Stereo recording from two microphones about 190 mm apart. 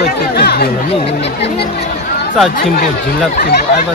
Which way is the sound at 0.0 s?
55° left (ahead or behind).